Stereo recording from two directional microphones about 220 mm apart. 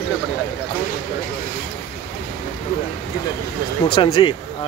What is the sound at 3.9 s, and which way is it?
Speech, 20° left (ahead or behind).